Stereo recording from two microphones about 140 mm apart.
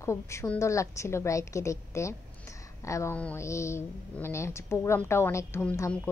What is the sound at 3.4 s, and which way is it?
A woman's voice, 20° left (ahead or behind).